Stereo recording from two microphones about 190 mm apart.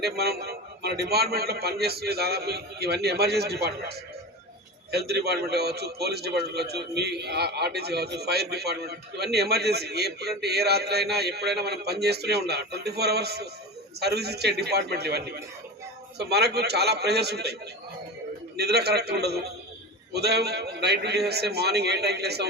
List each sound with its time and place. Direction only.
0.0 s a man's voice: 55° right (ahead or behind)